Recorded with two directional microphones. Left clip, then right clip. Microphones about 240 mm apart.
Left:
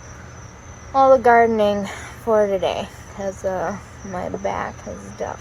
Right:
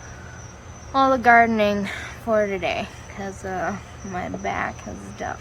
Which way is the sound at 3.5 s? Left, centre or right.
Centre.